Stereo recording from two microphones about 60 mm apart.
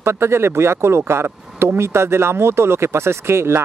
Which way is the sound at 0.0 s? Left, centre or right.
Right.